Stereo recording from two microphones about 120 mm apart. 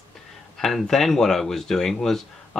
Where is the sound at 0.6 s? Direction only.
5° left (ahead or behind).